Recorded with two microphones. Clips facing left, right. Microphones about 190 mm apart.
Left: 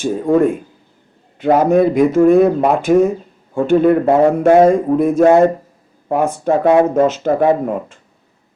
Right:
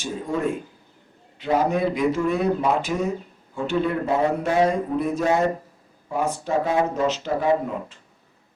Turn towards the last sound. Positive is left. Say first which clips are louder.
# left 6 dB
turn(degrees=50)  # may be behind; listen again after turning